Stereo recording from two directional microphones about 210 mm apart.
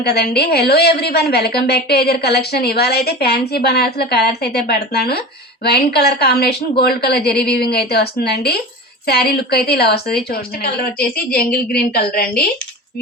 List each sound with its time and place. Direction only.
0.0 s a woman's voice: 50° left (ahead or behind)
11.8 s a woman's voice: 45° left (ahead or behind)